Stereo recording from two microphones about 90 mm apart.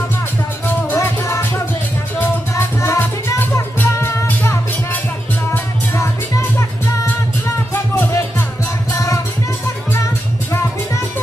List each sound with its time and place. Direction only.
0.9 s music: 35° left (ahead or behind)
5.5 s music: 35° left (ahead or behind)
7.7 s music: 25° left (ahead or behind)
8.9 s music: 35° left (ahead or behind)